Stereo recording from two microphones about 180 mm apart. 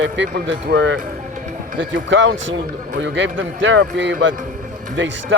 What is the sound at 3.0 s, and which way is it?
A man's voice, 85° right.